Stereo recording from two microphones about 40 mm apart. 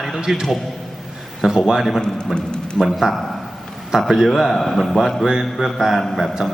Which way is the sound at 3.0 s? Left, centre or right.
Centre.